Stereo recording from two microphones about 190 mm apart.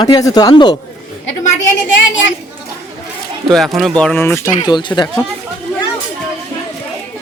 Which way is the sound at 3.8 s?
Centre (ahead or behind).